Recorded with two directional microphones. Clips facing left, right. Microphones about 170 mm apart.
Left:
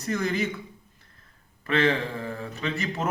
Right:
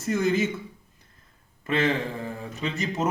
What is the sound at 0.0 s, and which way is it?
Speech, 25° right (ahead or behind).